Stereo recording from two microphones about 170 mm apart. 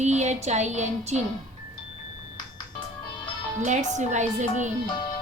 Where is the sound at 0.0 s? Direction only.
40° right (ahead or behind).